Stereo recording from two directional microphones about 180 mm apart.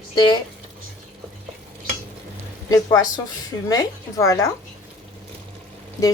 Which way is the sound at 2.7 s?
20° left (ahead or behind).